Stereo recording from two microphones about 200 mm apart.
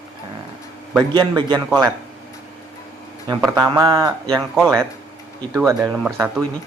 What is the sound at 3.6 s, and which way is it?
Speech, 20° right (ahead or behind).